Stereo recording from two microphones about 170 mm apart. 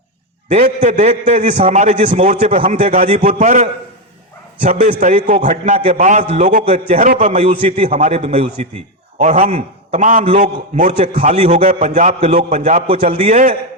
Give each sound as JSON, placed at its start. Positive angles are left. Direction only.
{"t": 0.4, "sound": "a man's voice", "side_deg": -35}
{"t": 4.8, "sound": "a man's voice", "side_deg": -45}